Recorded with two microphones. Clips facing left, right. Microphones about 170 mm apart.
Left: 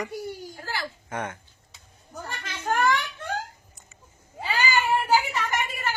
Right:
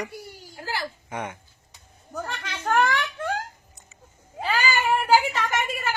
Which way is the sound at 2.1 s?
65° right (ahead or behind).